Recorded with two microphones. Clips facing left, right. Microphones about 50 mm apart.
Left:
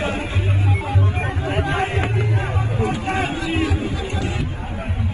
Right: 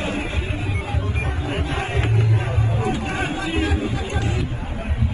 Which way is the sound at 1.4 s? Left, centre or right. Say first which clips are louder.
Left 5 dB; left.